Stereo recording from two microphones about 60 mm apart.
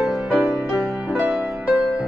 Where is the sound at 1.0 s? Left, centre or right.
Right.